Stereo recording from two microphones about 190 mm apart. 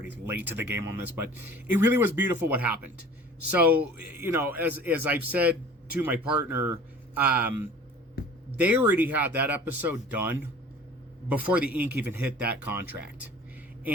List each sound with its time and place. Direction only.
0.1 s a man's voice: 10° right (ahead or behind)
8.2 s a sound: 50° left (ahead or behind)
8.5 s a man's voice: 10° right (ahead or behind)